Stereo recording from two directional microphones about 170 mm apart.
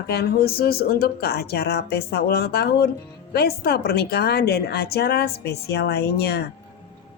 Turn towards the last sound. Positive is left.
turn(degrees=70)  # may be behind; listen again after turning